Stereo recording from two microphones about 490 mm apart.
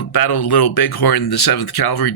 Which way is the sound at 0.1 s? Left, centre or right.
Left.